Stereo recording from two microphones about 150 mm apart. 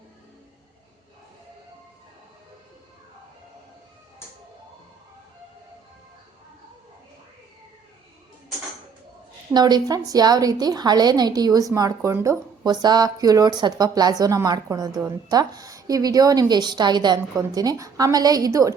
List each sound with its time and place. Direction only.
9.5 s a woman's voice: 30° right (ahead or behind)